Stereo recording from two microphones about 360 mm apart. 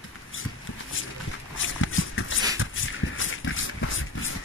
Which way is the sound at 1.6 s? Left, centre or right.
Left.